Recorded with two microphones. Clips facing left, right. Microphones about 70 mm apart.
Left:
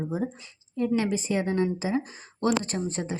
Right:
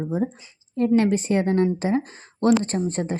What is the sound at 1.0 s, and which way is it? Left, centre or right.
Speech, right.